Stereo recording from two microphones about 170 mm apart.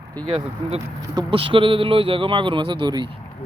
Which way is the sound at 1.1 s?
30° right (ahead or behind).